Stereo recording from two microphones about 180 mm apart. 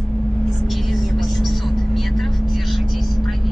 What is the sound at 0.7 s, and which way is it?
Vehicle, centre (ahead or behind).